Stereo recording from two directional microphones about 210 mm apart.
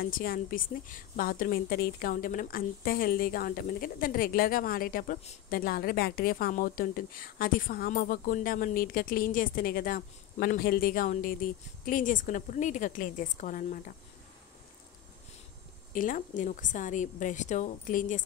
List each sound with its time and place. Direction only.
0.0 s a woman's voice: 45° left (ahead or behind)
15.9 s a woman's voice: 40° left (ahead or behind)